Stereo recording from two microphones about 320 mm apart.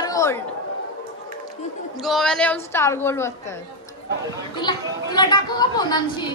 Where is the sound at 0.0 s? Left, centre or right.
Centre.